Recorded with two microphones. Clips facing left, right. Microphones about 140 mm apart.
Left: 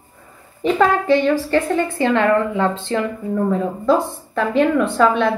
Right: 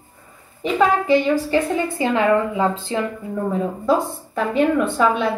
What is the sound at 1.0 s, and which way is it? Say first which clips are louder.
A woman's voice: left 1 dB; 5° right (ahead or behind).